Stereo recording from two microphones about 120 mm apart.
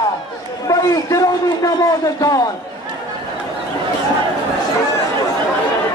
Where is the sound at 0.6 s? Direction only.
30° left (ahead or behind).